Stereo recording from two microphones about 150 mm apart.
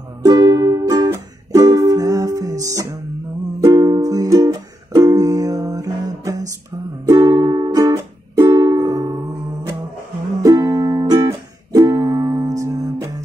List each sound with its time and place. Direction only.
0.2 s music: 20° right (ahead or behind)